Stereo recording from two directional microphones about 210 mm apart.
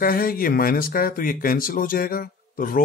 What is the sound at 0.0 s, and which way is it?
Speech, 45° left (ahead or behind).